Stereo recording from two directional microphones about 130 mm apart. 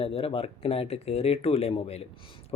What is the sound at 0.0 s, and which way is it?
Speech, 45° left (ahead or behind).